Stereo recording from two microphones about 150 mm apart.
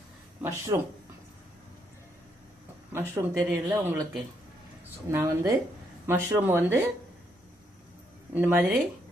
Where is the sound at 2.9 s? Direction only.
15° right (ahead or behind).